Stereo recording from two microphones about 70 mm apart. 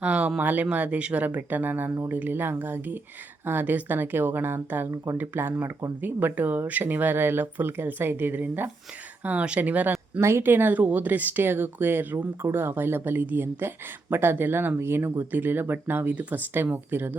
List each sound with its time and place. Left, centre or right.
0.0 s speech: centre
9.9 s speech: right